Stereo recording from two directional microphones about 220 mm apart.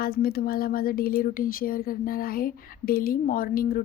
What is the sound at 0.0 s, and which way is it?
Speech, 45° left (ahead or behind).